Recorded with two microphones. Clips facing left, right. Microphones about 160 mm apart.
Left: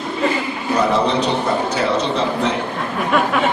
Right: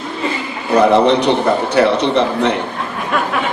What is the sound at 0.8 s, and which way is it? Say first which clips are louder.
A man's voice: right 6 dB; 65° right (ahead or behind).